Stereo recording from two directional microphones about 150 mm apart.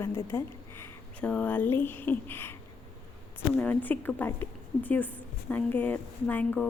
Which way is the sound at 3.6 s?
10° left (ahead or behind).